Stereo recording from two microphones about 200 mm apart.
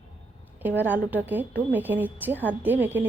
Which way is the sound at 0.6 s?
10° right (ahead or behind).